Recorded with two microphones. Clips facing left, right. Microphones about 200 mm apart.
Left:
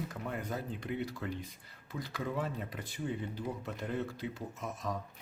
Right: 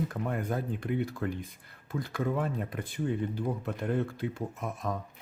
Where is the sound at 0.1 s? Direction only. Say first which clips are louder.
Right 6 dB; 55° right (ahead or behind).